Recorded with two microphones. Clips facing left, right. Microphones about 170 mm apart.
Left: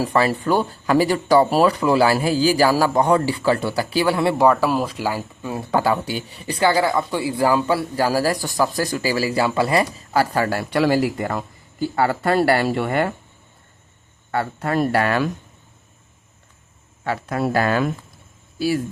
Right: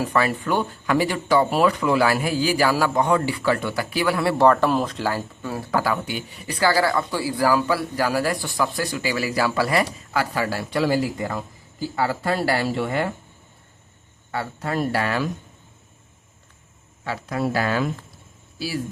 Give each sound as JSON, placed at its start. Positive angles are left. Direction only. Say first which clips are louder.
{"t": 0.0, "sound": "speech", "louder": "left 3 dB", "side_deg": 30}
{"t": 4.4, "sound": "speech", "louder": "even", "side_deg": 5}
{"t": 6.6, "sound": "speech", "louder": "left 2 dB", "side_deg": 20}
{"t": 14.3, "sound": "speech", "louder": "left 4 dB", "side_deg": 60}
{"t": 17.0, "sound": "speech", "louder": "left 3 dB", "side_deg": 55}